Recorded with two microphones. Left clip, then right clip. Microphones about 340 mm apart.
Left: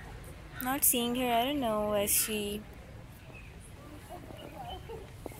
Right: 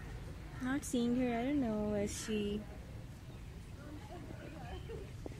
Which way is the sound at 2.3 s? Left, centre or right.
Centre.